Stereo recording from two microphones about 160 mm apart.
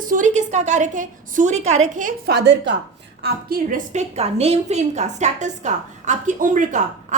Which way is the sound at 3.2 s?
70° right (ahead or behind).